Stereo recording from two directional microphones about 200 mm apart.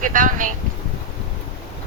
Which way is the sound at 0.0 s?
40° right (ahead or behind).